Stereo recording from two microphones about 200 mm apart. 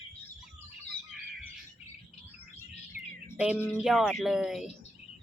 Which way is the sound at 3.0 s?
45° left (ahead or behind).